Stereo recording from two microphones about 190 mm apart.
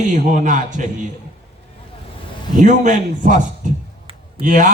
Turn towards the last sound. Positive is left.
turn(degrees=-45)  # may be behind; listen again after turning